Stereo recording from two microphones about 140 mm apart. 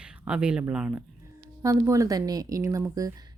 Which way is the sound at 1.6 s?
20° right (ahead or behind).